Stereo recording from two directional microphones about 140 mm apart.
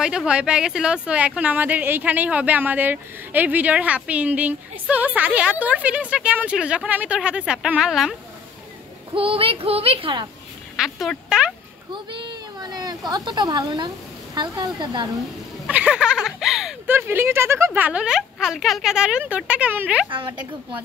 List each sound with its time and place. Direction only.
0.0 s speech: 5° right (ahead or behind)
9.1 s a woman's voice: 40° right (ahead or behind)
10.8 s speech: centre (ahead or behind)
11.9 s a woman's voice: 35° right (ahead or behind)
15.6 s a sound: 5° right (ahead or behind)
16.8 s speech: 15° right (ahead or behind)
20.1 s a woman's voice: 35° right (ahead or behind)